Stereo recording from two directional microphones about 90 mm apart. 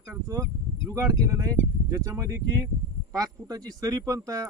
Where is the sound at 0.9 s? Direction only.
35° right (ahead or behind).